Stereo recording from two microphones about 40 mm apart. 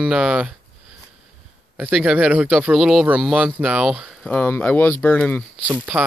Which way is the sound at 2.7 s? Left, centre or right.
Centre.